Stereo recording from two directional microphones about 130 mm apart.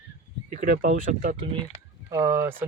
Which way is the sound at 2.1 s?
20° right (ahead or behind).